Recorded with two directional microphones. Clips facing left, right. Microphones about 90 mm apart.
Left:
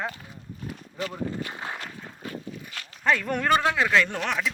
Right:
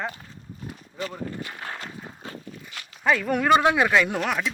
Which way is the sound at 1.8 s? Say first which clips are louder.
Right 1 dB; 30° right (ahead or behind).